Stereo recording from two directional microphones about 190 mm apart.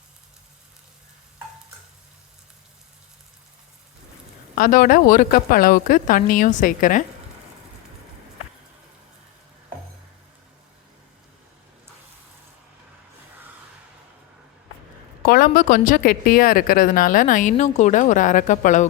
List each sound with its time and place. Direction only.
4.5 s speech: 45° left (ahead or behind)
15.3 s speech: 50° left (ahead or behind)